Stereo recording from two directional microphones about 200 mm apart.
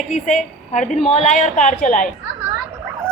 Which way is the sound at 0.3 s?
40° left (ahead or behind).